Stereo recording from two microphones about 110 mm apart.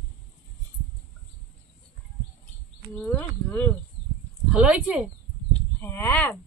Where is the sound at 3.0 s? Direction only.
20° left (ahead or behind).